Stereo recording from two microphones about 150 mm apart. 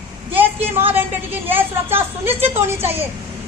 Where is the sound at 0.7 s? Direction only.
15° right (ahead or behind).